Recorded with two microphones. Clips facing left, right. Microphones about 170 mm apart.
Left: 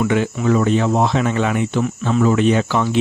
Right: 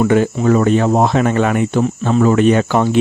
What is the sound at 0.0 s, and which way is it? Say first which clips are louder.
Speech: right 5 dB; 45° right (ahead or behind).